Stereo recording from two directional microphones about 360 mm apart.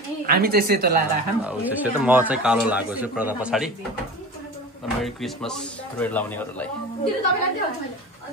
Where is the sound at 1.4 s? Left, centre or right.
Centre.